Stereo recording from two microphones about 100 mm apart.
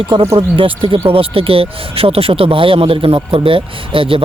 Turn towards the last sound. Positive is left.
turn(degrees=-65)  # may be behind; listen again after turning